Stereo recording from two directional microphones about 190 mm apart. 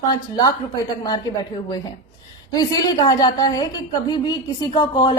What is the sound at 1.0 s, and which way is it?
Speech, 20° left (ahead or behind).